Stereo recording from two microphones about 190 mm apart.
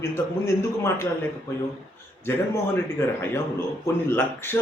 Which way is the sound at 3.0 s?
15° left (ahead or behind).